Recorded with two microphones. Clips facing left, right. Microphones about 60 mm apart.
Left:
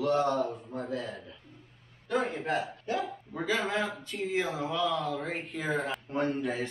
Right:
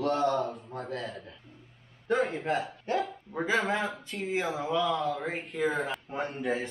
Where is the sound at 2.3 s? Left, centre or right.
Right.